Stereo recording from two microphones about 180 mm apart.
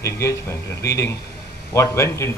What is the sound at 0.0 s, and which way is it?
A man's voice, 15° left (ahead or behind).